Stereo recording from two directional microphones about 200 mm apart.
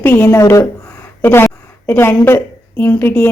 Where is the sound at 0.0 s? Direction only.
10° left (ahead or behind).